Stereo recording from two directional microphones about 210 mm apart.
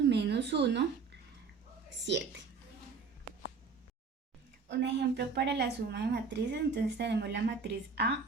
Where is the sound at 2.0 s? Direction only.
55° right (ahead or behind).